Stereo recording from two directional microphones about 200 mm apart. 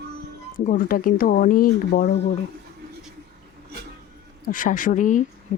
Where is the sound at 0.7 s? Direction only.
45° left (ahead or behind).